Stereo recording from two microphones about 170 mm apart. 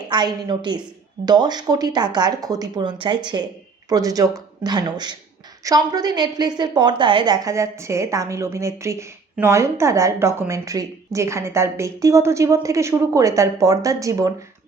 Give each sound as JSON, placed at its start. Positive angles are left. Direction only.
{"t": 0.1, "sound": "a woman's voice", "side_deg": -25}